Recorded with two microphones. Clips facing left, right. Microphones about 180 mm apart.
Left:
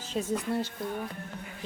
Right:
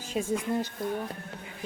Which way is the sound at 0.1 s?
10° right (ahead or behind).